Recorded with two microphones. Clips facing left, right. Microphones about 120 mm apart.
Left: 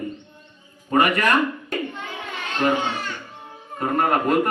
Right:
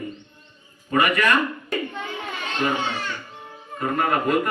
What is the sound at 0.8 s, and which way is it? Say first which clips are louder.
Speech: left 2 dB; 40° left (ahead or behind).